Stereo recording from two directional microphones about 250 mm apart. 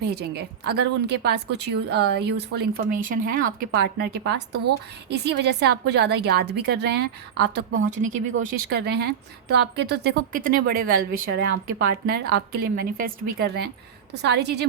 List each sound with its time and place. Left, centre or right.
0.0 s a woman's voice: right
7.9 s a woman's voice: right